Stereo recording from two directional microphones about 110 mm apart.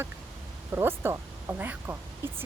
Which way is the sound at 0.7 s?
20° right (ahead or behind).